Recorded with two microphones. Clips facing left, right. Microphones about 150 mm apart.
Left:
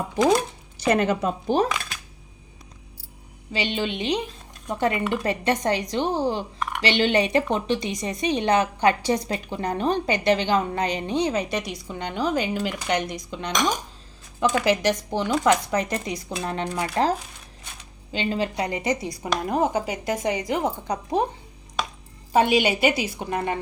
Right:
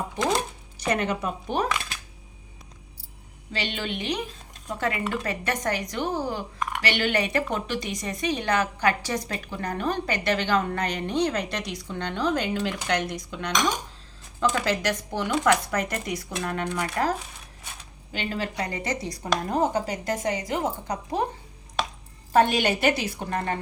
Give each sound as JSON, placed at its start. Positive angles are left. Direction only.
{"t": 0.8, "sound": "speech", "side_deg": 35}
{"t": 3.5, "sound": "a woman's voice", "side_deg": 15}
{"t": 22.3, "sound": "a woman's voice", "side_deg": 10}